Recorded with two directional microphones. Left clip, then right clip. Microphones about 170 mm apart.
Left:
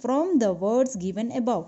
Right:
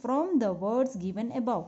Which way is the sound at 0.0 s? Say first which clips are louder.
Left 5 dB; 25° left (ahead or behind).